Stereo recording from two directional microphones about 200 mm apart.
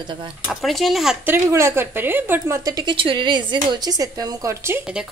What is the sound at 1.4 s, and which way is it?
A woman's voice, 15° right (ahead or behind).